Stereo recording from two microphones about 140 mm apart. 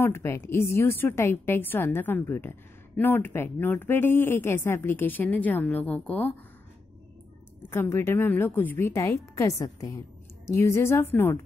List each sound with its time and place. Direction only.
0.0 s a woman's voice: 20° left (ahead or behind)
7.7 s a woman's voice: 15° left (ahead or behind)